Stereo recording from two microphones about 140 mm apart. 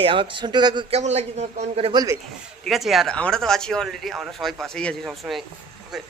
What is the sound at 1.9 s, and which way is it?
Speech, 30° right (ahead or behind).